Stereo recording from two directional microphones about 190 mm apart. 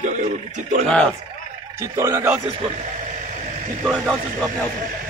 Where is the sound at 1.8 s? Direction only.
15° right (ahead or behind).